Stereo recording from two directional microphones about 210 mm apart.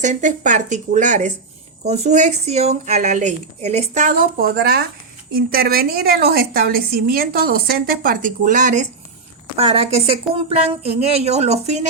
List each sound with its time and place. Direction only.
0.0 s a woman's voice: 35° right (ahead or behind)